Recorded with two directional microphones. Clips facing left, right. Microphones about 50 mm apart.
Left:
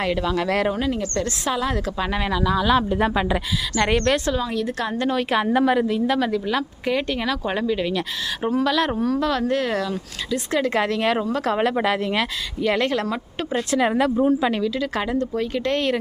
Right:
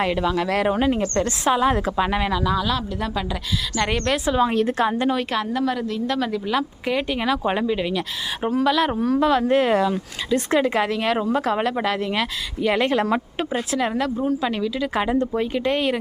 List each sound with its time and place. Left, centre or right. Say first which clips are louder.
0.0 s speech: right 1 dB; centre
0.7 s speech: right 3 dB; right
2.0 s speech: right 2 dB; centre
2.6 s speech: left 6 dB; left
3.8 s speech: left 3 dB; centre
4.4 s a woman's voice: right 5 dB; right
4.9 s speech: right 1 dB; centre
5.5 s speech: left 5 dB; left
6.1 s speech: left 2 dB; centre
9.5 s speech: right 4 dB; right
10.6 s speech: even; centre
13.7 s a woman's voice: left 5 dB; centre
14.5 s speech: even; centre